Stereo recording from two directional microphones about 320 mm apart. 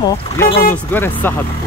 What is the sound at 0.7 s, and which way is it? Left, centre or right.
Speech, centre.